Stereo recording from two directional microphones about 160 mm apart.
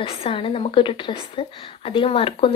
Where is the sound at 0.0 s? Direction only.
35° left (ahead or behind).